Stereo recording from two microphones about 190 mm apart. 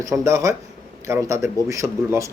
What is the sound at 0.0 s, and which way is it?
A man's voice, 15° right (ahead or behind).